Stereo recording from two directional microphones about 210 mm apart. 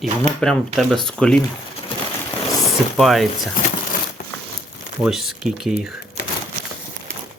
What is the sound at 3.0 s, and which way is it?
Speech, centre (ahead or behind).